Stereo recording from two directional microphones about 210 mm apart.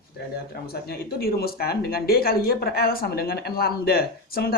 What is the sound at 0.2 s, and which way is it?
Speech, 50° left (ahead or behind).